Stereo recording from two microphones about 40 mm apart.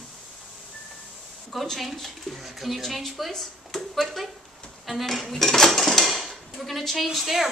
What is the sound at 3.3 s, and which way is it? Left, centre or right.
Speech, centre.